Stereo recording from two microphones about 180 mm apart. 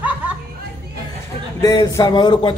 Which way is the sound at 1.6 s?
20° left (ahead or behind).